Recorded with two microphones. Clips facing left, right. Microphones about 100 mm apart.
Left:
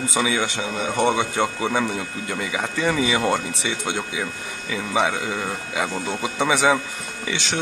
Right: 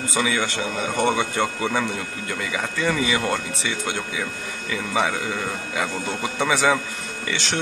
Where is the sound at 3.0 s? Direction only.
20° left (ahead or behind).